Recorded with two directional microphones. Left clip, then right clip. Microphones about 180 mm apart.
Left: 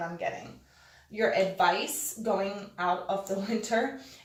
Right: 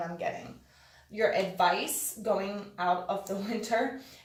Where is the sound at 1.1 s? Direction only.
25° right (ahead or behind).